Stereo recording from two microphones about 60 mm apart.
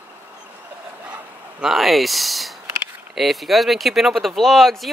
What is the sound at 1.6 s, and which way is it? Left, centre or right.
Speech, centre.